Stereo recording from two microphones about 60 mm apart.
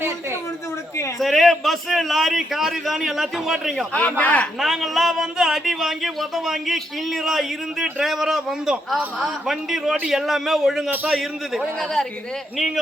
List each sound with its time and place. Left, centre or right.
1.2 s a man's voice: centre
4.2 s speech: left
4.6 s a man's voice: centre